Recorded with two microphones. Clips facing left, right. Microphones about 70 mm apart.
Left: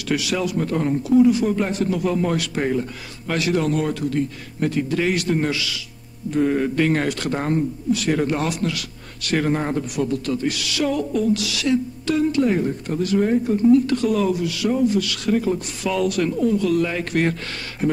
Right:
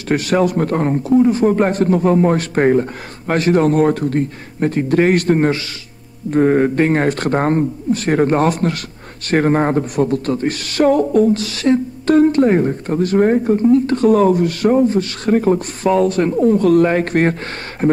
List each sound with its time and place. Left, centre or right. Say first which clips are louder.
0.1 s speech: right 7 dB; right